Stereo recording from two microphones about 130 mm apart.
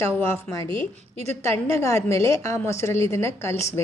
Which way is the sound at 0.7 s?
40° right (ahead or behind).